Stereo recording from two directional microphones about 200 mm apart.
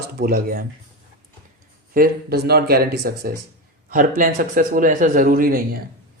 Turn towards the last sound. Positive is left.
turn(degrees=-45)  # may be behind; listen again after turning